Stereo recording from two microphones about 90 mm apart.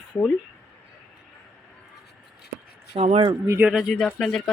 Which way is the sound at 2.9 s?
70° right (ahead or behind).